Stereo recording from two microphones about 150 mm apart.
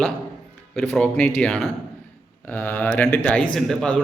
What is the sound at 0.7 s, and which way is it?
A man's voice, 5° left (ahead or behind).